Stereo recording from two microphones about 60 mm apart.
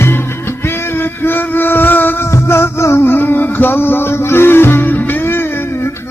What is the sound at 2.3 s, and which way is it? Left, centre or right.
Music, left.